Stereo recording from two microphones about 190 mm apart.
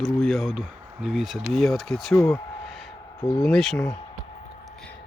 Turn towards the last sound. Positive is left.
turn(degrees=5)  # may be behind; listen again after turning